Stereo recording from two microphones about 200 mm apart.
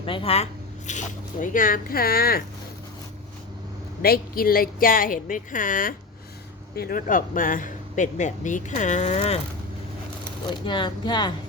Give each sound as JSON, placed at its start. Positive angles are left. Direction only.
{"t": 0.0, "sound": "speech", "side_deg": 25}
{"t": 0.9, "sound": "speech", "side_deg": 40}
{"t": 4.0, "sound": "speech", "side_deg": 50}
{"t": 10.7, "sound": "speech", "side_deg": 25}